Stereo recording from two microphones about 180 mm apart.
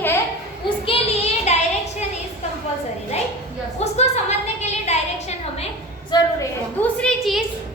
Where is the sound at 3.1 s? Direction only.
35° left (ahead or behind).